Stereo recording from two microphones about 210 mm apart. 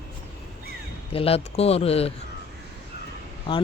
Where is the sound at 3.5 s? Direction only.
25° left (ahead or behind).